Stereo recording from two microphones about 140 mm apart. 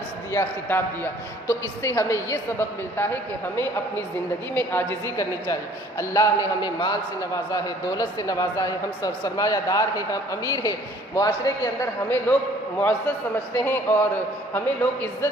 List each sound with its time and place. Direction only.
0.3 s a man's voice: 15° left (ahead or behind)
12.0 s a man's voice: 10° left (ahead or behind)
13.7 s a man's voice: 15° left (ahead or behind)